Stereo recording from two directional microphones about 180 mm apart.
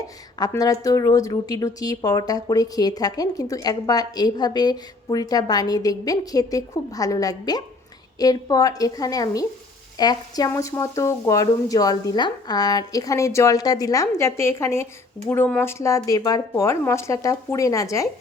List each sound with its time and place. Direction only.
0.3 s a woman's voice: 20° left (ahead or behind)